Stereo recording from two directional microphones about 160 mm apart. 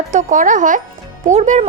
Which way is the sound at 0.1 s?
50° right (ahead or behind).